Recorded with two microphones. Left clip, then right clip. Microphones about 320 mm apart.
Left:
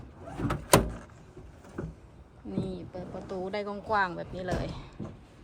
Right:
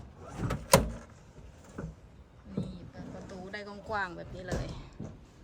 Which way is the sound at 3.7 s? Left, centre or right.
Centre.